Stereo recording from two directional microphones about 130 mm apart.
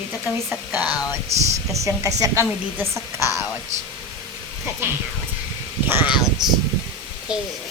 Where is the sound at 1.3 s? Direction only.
55° right (ahead or behind).